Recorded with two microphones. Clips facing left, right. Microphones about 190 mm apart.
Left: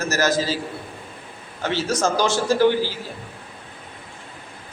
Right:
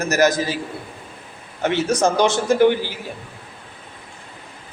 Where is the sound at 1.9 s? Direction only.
20° right (ahead or behind).